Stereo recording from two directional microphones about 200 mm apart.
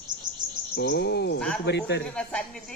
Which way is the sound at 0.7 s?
50° left (ahead or behind).